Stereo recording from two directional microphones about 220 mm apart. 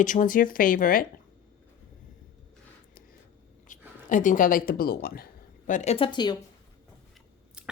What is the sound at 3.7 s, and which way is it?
Speech, 35° left (ahead or behind).